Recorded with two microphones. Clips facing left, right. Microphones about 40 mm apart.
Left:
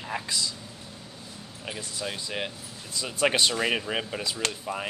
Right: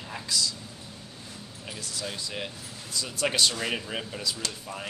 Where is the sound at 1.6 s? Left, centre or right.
Left.